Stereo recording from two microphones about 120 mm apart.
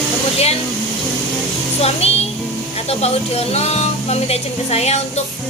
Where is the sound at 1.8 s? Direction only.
60° left (ahead or behind).